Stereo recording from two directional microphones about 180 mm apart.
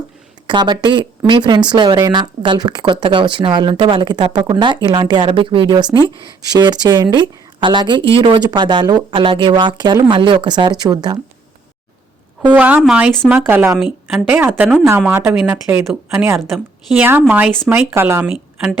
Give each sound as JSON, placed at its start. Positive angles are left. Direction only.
{"t": 0.4, "sound": "speech", "side_deg": -25}
{"t": 12.5, "sound": "speech", "side_deg": -10}